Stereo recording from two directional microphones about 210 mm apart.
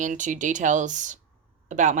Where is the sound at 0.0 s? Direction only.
35° right (ahead or behind).